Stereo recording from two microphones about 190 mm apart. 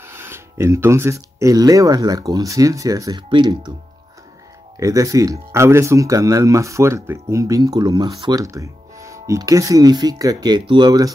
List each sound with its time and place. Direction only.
0.0 s speech: 15° right (ahead or behind)
4.7 s speech: 15° right (ahead or behind)